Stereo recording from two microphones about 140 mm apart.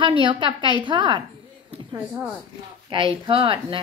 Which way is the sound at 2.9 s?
40° right (ahead or behind).